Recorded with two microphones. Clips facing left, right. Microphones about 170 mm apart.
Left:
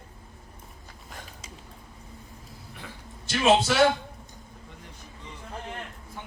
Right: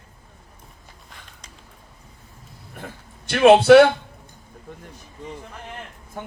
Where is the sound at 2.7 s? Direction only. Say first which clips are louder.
Right 7 dB; 55° right (ahead or behind).